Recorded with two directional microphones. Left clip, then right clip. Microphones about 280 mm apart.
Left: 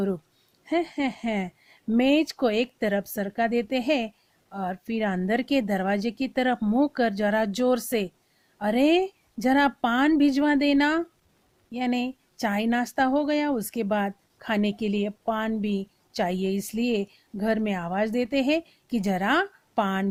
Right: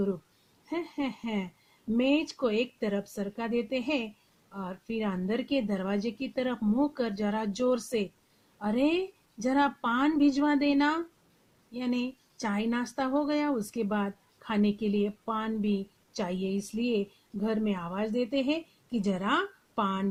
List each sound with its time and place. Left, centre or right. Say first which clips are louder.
0.7 s speech: left 8 dB; left